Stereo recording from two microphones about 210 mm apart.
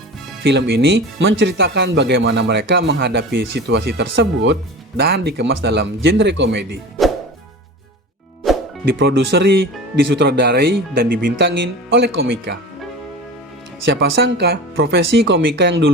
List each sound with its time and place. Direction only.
0.4 s speech: 50° right (ahead or behind)
8.4 s music: centre (ahead or behind)
9.0 s speech: 50° right (ahead or behind)
13.8 s speech: 55° right (ahead or behind)